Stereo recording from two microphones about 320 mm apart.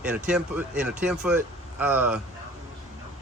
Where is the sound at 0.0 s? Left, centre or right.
Centre.